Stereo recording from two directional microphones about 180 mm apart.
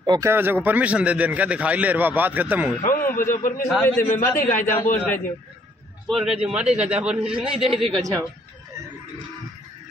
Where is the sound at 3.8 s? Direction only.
15° left (ahead or behind).